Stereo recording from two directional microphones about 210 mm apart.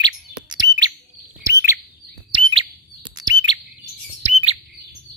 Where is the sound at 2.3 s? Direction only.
25° right (ahead or behind).